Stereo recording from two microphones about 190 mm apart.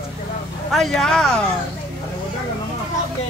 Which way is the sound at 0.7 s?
Centre (ahead or behind).